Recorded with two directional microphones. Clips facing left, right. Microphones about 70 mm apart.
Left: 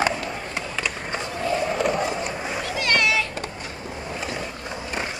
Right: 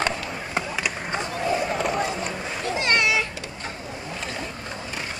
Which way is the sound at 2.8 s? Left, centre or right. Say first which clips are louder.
Even; right.